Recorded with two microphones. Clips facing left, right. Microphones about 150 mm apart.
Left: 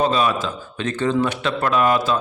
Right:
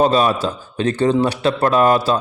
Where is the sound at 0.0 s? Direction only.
40° right (ahead or behind).